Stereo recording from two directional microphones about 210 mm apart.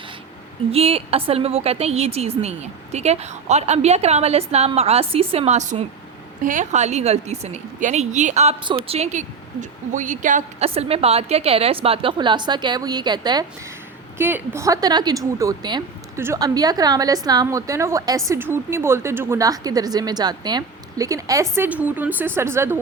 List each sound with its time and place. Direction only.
0.7 s a woman's voice: 30° right (ahead or behind); by 22.8 s 10° right (ahead or behind)